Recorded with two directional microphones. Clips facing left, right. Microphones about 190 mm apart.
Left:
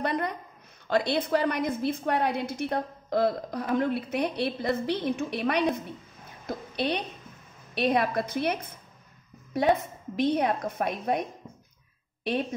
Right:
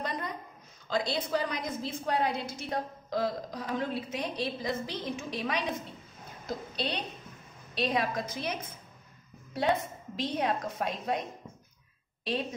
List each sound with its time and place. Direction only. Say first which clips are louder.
0.0 s a sound: left 7 dB; 60° left (ahead or behind)
0.8 s a woman's voice: left 5 dB; 60° left (ahead or behind)
10.1 s a woman's voice: left 6 dB; 55° left (ahead or behind)